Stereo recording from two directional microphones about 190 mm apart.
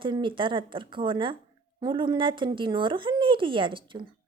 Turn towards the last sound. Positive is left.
turn(degrees=-25)  # may be behind; listen again after turning